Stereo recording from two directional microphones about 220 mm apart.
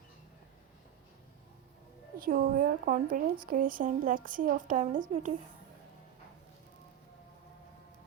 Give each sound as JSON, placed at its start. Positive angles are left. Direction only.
{"t": 2.1, "sound": "speech", "side_deg": -40}